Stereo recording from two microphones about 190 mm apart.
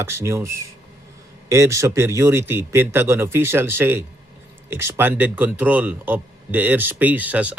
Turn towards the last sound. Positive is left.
turn(degrees=-10)  # may be behind; listen again after turning